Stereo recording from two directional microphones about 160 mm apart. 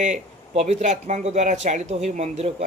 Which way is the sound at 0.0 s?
45° right (ahead or behind).